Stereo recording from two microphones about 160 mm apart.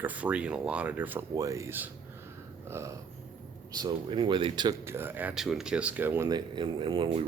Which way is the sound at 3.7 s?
25° right (ahead or behind).